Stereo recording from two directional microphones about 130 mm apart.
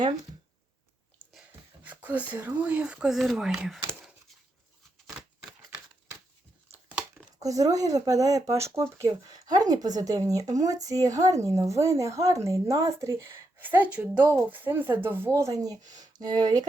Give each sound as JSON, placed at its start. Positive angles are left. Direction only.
{"t": 1.3, "sound": "speech", "side_deg": -10}
{"t": 7.3, "sound": "speech", "side_deg": -25}